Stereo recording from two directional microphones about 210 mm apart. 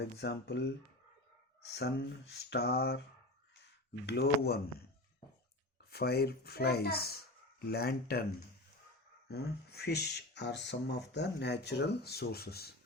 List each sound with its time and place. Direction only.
0.0 s speech: 50° left (ahead or behind)
1.7 s speech: 50° left (ahead or behind)
4.0 s speech: 50° left (ahead or behind)
5.9 s speech: 50° left (ahead or behind)
9.3 s speech: 50° left (ahead or behind)